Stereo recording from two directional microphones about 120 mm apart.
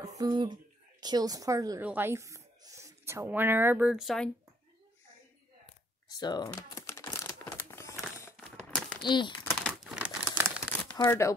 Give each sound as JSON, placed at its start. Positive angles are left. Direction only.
{"t": 0.0, "sound": "a woman's voice", "side_deg": -30}
{"t": 1.8, "sound": "speech", "side_deg": -15}
{"t": 3.9, "sound": "speech", "side_deg": 0}
{"t": 6.0, "sound": "speech", "side_deg": 35}
{"t": 6.5, "sound": "typing", "side_deg": 20}
{"t": 7.5, "sound": "a sound", "side_deg": 25}
{"t": 8.5, "sound": "crumpling", "side_deg": 5}
{"t": 9.0, "sound": "speech", "side_deg": 40}
{"t": 9.6, "sound": "crumpling", "side_deg": 5}
{"t": 9.9, "sound": "crumpling", "side_deg": -10}
{"t": 11.0, "sound": "speech", "side_deg": 25}